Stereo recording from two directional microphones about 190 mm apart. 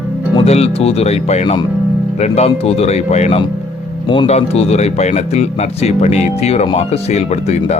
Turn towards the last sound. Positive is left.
turn(degrees=35)  # may be behind; listen again after turning